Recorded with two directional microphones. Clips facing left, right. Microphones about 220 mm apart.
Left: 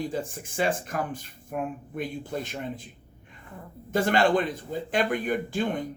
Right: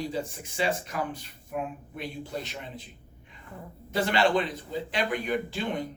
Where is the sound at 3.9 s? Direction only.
50° left (ahead or behind).